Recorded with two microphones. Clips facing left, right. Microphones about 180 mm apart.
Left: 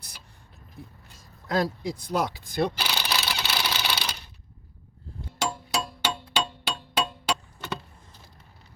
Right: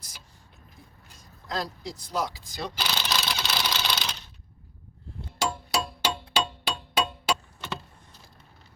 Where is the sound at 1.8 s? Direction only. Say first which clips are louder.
Left 4 dB; 55° left (ahead or behind).